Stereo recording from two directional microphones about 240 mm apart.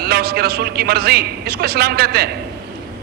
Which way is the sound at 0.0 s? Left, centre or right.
Right.